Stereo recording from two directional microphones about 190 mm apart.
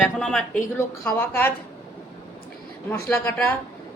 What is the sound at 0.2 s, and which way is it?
A woman's voice, 5° left (ahead or behind).